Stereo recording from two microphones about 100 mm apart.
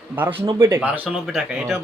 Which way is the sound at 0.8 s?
15° right (ahead or behind).